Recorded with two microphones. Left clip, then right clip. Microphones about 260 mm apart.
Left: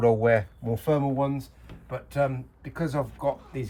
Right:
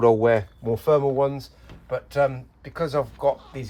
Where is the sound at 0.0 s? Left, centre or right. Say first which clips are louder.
Right 3 dB; right.